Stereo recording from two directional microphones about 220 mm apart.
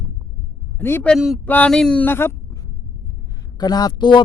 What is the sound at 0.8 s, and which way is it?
Speech, 10° left (ahead or behind).